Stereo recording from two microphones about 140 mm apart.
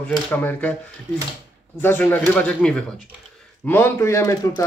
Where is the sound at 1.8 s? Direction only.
15° left (ahead or behind).